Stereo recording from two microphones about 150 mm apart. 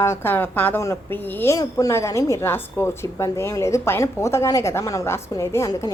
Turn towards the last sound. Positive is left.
turn(degrees=20)  # may be behind; listen again after turning